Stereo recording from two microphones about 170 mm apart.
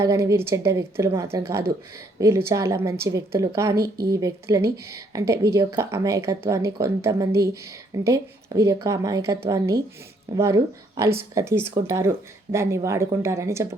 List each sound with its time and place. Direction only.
0.0 s speech: 15° right (ahead or behind)